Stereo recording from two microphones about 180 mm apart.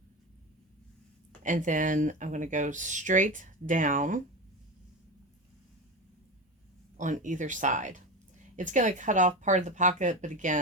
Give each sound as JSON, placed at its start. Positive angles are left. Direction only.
{"t": 1.4, "sound": "speech", "side_deg": -45}
{"t": 6.9, "sound": "speech", "side_deg": -45}